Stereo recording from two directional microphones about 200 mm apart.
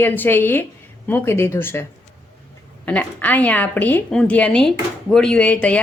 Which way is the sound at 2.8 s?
5° left (ahead or behind).